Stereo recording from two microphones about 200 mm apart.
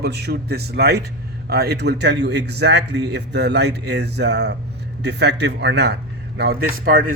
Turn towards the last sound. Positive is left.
turn(degrees=-45)  # may be behind; listen again after turning